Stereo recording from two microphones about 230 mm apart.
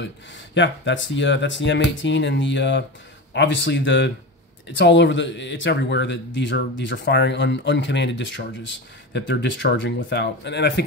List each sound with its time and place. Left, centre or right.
0.6 s speech: left